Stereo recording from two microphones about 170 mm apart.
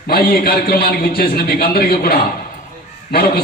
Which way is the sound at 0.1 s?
65° left (ahead or behind).